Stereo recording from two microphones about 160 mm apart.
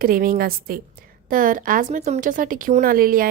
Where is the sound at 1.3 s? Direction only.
55° right (ahead or behind).